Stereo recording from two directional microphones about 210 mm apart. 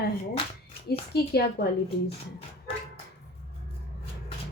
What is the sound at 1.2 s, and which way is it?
Speech, 50° left (ahead or behind).